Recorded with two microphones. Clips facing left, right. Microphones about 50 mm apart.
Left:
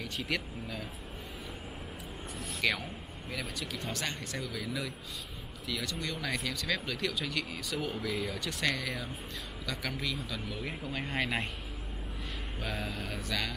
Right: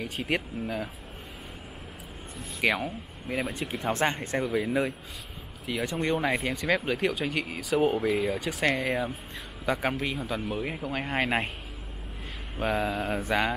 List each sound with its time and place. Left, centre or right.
0.0 s speech: right
2.8 s speech: right
12.5 s speech: right